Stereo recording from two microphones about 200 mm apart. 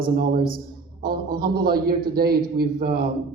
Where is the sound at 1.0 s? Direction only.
50° right (ahead or behind).